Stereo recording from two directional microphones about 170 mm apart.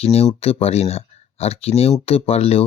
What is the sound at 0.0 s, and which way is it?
Speech, 35° left (ahead or behind).